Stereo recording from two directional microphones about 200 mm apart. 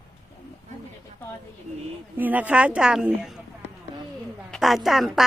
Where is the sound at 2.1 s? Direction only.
10° right (ahead or behind).